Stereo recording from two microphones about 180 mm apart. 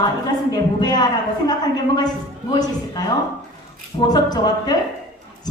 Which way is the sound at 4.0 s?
20° left (ahead or behind).